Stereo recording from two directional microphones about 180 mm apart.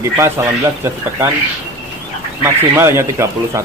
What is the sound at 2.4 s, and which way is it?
Speech, 15° right (ahead or behind).